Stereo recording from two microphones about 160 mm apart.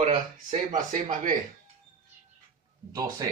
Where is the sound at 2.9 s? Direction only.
25° right (ahead or behind).